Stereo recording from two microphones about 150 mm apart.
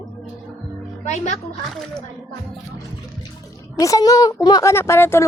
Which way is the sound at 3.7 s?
25° left (ahead or behind).